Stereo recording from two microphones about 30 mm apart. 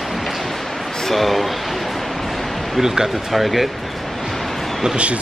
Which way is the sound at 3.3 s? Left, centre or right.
Centre.